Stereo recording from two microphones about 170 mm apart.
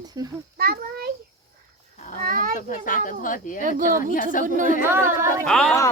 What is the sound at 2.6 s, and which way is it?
Speech, 50° left (ahead or behind).